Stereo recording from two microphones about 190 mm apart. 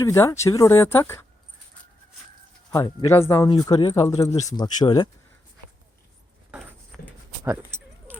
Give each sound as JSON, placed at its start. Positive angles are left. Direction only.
{"t": 0.0, "sound": "speech", "side_deg": 15}
{"t": 2.7, "sound": "speech", "side_deg": 15}
{"t": 7.4, "sound": "a sound", "side_deg": -15}